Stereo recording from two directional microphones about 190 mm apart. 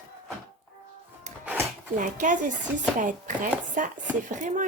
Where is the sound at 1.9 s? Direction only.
40° right (ahead or behind).